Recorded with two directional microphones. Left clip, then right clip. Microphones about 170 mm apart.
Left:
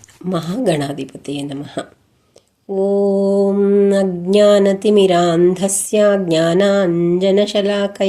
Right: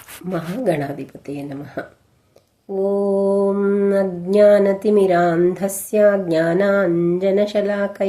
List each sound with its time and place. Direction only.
0.3 s mantra: 25° left (ahead or behind)